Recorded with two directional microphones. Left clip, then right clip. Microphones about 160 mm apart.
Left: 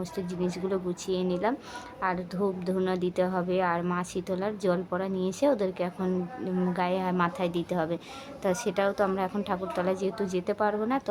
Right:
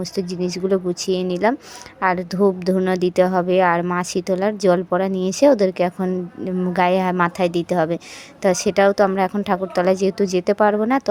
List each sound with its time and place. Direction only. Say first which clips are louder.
0.7 s a woman's voice: right 10 dB; 40° right (ahead or behind)